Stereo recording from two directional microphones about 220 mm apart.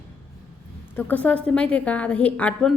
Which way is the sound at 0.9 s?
5° left (ahead or behind).